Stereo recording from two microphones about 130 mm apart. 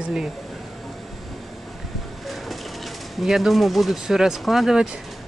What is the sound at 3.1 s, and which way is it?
Speech, centre (ahead or behind).